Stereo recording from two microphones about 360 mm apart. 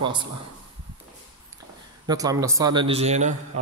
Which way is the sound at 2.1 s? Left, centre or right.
Centre.